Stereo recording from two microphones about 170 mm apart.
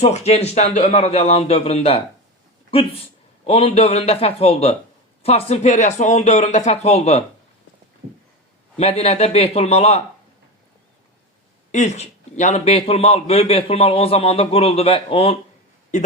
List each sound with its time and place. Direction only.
0.0 s a man's voice: 40° left (ahead or behind)
8.8 s a man's voice: 35° left (ahead or behind)
11.7 s a man's voice: 45° left (ahead or behind)